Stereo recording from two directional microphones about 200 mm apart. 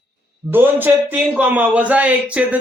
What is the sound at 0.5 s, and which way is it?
A man's voice, 10° right (ahead or behind).